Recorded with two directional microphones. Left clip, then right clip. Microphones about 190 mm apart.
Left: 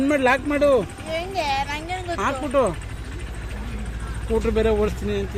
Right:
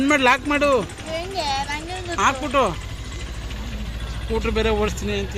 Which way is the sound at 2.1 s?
5° left (ahead or behind).